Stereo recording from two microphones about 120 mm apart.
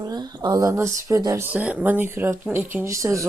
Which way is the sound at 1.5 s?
10° right (ahead or behind).